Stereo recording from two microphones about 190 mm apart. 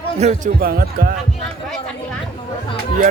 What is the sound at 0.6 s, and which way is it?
Speech, 50° right (ahead or behind).